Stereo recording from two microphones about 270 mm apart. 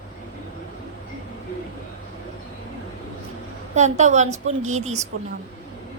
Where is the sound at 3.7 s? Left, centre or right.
Right.